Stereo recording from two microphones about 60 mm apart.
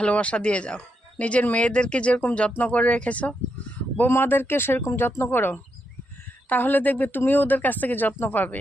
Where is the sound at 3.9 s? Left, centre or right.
Left.